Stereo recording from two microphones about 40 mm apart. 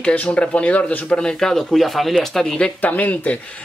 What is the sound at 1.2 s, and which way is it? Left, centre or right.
Speech, centre.